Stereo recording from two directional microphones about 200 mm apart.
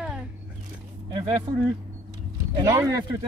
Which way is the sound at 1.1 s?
30° right (ahead or behind).